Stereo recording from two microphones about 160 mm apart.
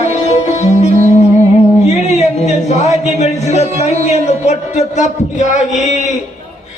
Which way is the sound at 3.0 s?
45° left (ahead or behind).